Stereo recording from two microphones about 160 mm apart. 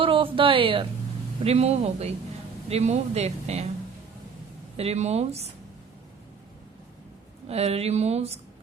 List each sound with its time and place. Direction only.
0.0 s speech: 35° right (ahead or behind)
4.8 s speech: 40° right (ahead or behind)
7.4 s speech: 40° right (ahead or behind)